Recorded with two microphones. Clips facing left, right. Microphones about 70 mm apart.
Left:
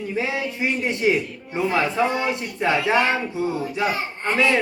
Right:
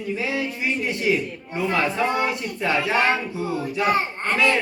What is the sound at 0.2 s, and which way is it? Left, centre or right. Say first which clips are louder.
A man's voice: left 5 dB; left.